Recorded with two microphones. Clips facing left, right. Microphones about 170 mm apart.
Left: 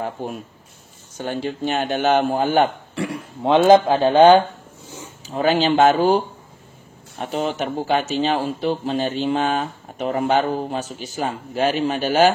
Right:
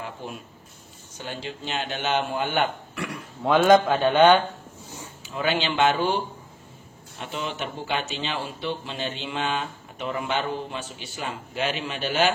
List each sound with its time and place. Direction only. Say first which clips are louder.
0.0 s speech: left 8 dB; 50° left (ahead or behind)
3.1 s speech: left 4 dB; 25° left (ahead or behind); by 12.4 s 40° left (ahead or behind)